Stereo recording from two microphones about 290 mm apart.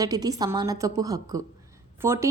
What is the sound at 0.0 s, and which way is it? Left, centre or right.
A woman's voice, centre.